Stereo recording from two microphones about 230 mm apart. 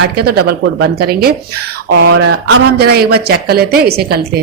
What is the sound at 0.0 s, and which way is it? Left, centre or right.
Speech, right.